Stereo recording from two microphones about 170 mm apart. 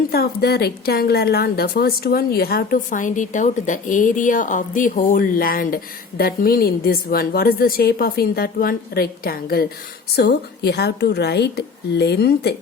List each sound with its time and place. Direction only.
0.1 s a woman's voice: 65° left (ahead or behind)
10.2 s a woman's voice: 75° left (ahead or behind)